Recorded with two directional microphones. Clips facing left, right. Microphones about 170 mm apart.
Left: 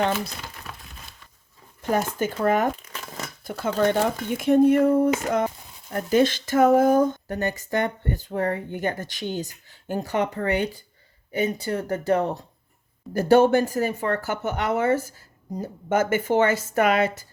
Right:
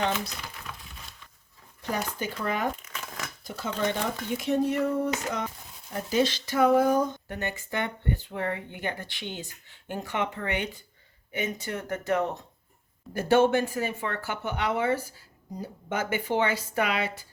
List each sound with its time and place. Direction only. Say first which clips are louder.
1.8 s a woman's voice: left 7 dB; 50° left (ahead or behind)
2.8 s shuffling cards: left 3 dB; 35° left (ahead or behind)
3.4 s a woman's voice: left 7 dB; 55° left (ahead or behind)